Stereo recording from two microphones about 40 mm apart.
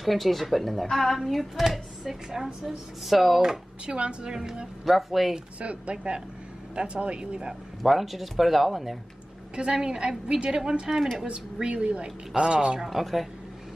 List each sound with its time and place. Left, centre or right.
0.0 s a woman's voice: centre
3.8 s a woman's voice: right
4.8 s speech: centre
5.6 s a woman's voice: right
7.8 s speech: centre
9.8 s a woman's voice: right
11.5 s a woman's voice: right
12.9 s speech: centre